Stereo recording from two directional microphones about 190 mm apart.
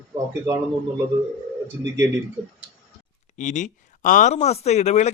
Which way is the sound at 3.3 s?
40° left (ahead or behind).